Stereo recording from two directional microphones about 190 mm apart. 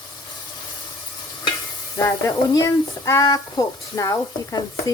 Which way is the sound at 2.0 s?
15° left (ahead or behind).